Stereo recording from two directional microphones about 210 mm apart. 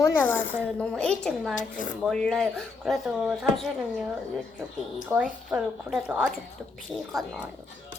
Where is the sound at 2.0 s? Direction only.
Centre (ahead or behind).